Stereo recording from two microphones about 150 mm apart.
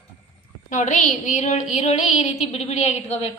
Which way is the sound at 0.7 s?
55° left (ahead or behind).